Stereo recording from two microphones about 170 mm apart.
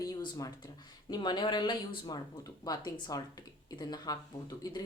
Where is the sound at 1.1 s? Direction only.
25° left (ahead or behind).